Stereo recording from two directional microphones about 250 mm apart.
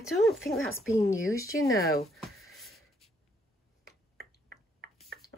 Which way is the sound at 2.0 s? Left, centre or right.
Centre.